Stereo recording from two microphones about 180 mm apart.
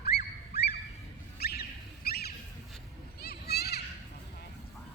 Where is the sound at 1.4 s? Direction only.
60° left (ahead or behind).